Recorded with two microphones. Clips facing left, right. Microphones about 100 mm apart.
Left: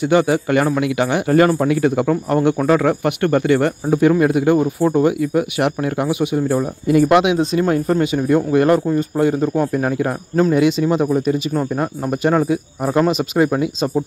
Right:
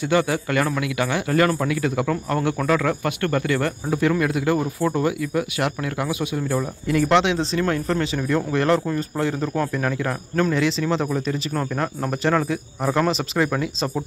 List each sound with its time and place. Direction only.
0.1 s speech: 20° left (ahead or behind)
8.9 s speech: 30° left (ahead or behind)
10.9 s speech: 10° left (ahead or behind)